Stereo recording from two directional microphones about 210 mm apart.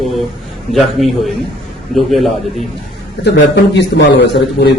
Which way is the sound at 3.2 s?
55° left (ahead or behind).